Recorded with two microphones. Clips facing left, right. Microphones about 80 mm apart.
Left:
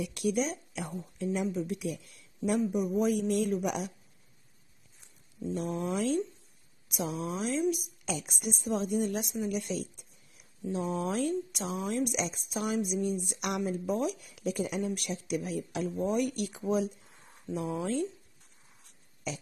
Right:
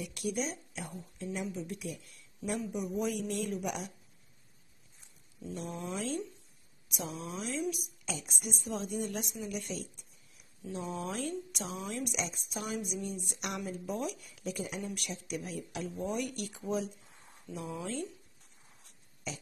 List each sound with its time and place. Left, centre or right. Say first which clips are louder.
0.0 s speech: left 5 dB; left
1.5 s speech: left 6 dB; left
2.4 s speech: left 7 dB; left
5.4 s a sound: left 7 dB; left
6.9 s speech: left 6 dB; left
8.3 s speech: left 6 dB; left
13.4 s speech: left 4 dB; left
13.7 s speech: left 6 dB; left